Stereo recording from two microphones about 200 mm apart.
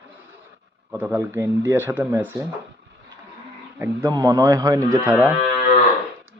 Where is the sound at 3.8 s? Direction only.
15° right (ahead or behind).